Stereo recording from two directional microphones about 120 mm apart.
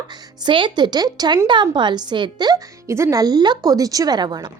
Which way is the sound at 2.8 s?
25° right (ahead or behind).